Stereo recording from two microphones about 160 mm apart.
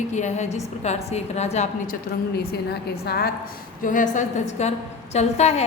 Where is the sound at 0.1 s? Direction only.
45° left (ahead or behind).